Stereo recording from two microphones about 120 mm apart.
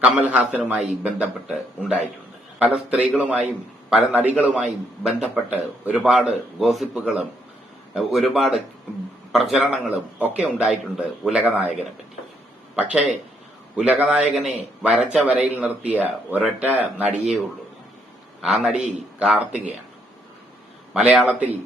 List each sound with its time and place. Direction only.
0.0 s a man's voice: 10° right (ahead or behind)
18.4 s a man's voice: 5° right (ahead or behind)
18.7 s a man's voice: 85° right
19.2 s a man's voice: 5° right (ahead or behind)
20.9 s a man's voice: 5° right (ahead or behind)